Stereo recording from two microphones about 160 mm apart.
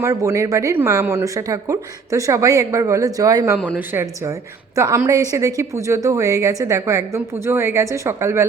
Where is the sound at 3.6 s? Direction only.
10° right (ahead or behind).